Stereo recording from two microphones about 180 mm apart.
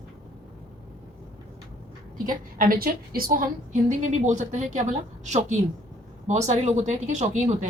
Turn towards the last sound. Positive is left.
turn(degrees=-40)  # may be behind; listen again after turning